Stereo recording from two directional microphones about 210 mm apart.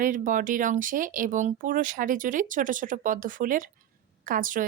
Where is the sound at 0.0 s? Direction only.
40° right (ahead or behind).